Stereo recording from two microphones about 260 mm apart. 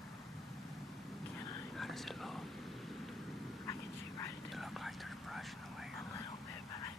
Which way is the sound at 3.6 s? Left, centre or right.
Centre.